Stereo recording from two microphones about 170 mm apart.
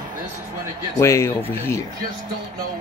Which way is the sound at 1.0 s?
15° left (ahead or behind).